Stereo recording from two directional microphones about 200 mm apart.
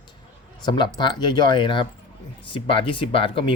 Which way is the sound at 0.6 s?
20° left (ahead or behind).